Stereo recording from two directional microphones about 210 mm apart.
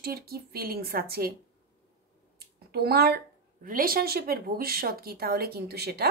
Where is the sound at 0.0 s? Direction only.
45° right (ahead or behind).